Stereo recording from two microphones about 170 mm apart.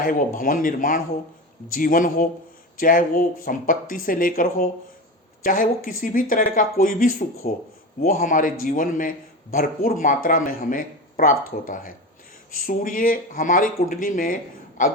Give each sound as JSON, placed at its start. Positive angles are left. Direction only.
{"t": 0.0, "sound": "a man's voice", "side_deg": 55}